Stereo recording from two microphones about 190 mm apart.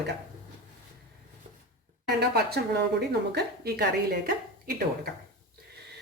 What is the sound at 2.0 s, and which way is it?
A woman's voice, 60° right (ahead or behind).